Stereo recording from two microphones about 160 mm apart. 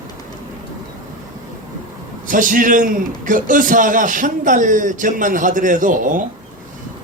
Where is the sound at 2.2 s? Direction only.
55° right (ahead or behind).